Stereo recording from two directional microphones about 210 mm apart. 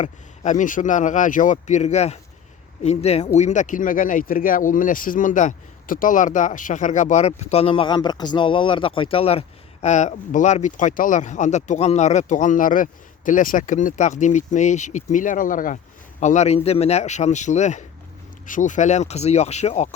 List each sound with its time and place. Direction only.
0.0 s speech: 35° left (ahead or behind)